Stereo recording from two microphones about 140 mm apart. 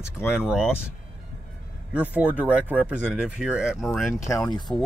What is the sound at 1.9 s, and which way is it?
Speech, 10° right (ahead or behind).